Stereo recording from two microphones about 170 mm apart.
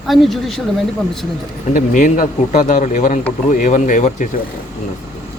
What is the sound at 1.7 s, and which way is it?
Speech, 50° left (ahead or behind).